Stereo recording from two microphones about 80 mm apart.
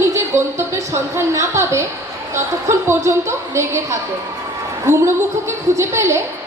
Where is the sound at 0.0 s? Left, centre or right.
Right.